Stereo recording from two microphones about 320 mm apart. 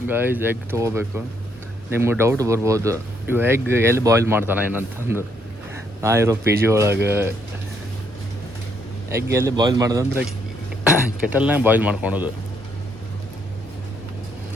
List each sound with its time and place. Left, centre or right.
0.1 s speech: centre
9.1 s speech: centre